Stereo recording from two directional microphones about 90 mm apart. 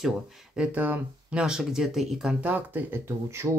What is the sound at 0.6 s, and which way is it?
Speech, 15° right (ahead or behind).